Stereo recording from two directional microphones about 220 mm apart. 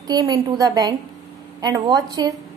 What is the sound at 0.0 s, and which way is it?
A woman's voice, 15° right (ahead or behind).